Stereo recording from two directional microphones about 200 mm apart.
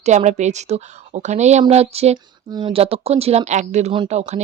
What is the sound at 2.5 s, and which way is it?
Speech, 20° right (ahead or behind).